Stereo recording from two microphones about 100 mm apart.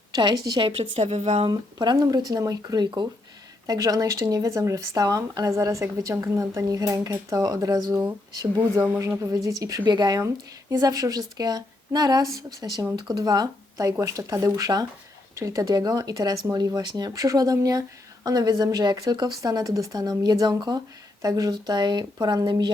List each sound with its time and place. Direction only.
0.1 s speech: 45° right (ahead or behind)
0.8 s a woman's voice: 90° right
1.5 s speech: 50° right (ahead or behind)
3.7 s speech: 40° right (ahead or behind)
10.2 s speech: 35° right (ahead or behind)